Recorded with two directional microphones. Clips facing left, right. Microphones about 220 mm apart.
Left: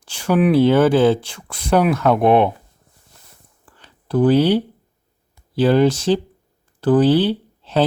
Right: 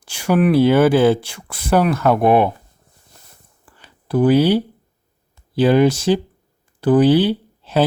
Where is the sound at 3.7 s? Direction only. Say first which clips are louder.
Right 1 dB; 10° right (ahead or behind).